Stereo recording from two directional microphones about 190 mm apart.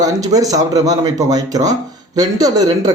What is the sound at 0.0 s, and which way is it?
Speech, 20° right (ahead or behind).